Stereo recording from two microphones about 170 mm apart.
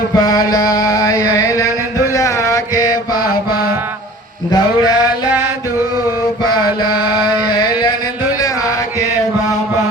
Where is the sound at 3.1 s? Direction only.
60° left (ahead or behind).